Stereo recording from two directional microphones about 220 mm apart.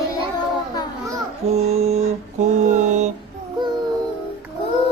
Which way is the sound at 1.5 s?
30° right (ahead or behind).